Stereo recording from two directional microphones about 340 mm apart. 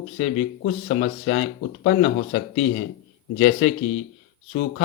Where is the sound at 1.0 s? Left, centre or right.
Left.